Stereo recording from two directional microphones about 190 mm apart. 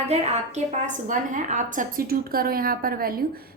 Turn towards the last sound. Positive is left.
turn(degrees=-50)  # may be behind; listen again after turning